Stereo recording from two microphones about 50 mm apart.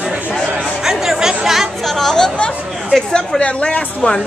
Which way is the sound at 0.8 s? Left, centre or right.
Centre.